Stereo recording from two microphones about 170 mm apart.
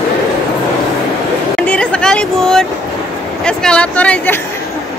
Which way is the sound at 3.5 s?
5° left (ahead or behind).